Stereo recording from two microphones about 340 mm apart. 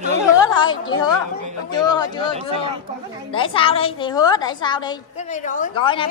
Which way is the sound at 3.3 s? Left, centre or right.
Centre.